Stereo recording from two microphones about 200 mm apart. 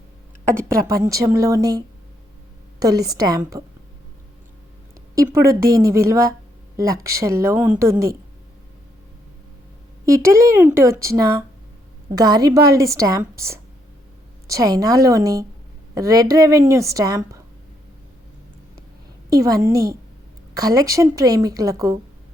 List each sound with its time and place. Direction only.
0.7 s a woman's voice: 15° right (ahead or behind)
5.1 s a woman's voice: 15° right (ahead or behind)
10.1 s a woman's voice: 15° right (ahead or behind)
19.3 s a woman's voice: 15° right (ahead or behind)